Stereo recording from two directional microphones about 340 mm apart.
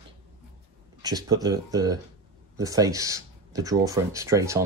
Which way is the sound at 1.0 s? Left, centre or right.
Centre.